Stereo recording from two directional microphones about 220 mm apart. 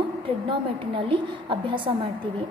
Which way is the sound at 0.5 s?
25° right (ahead or behind).